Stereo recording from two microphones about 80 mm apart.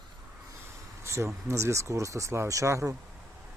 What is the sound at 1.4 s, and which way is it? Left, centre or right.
Speech, right.